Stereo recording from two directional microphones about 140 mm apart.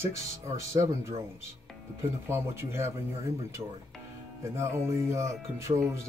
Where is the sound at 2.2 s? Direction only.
20° right (ahead or behind).